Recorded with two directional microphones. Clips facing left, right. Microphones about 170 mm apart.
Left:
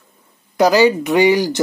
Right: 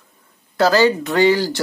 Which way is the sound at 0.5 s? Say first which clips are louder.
Left 2 dB; 15° left (ahead or behind).